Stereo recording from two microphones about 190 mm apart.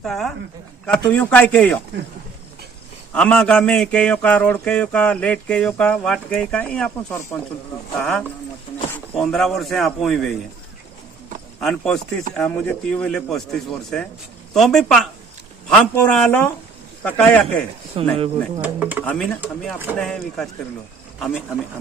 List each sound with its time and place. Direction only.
0.0 s a man's voice: centre (ahead or behind)
3.2 s a man's voice: 5° left (ahead or behind)
11.6 s a man's voice: 5° left (ahead or behind)
18.0 s speech: 30° right (ahead or behind)
18.6 s speech: 10° right (ahead or behind)
19.0 s a man's voice: 10° left (ahead or behind)